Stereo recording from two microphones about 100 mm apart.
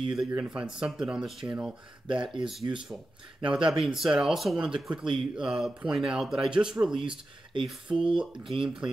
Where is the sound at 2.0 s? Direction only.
55° right (ahead or behind).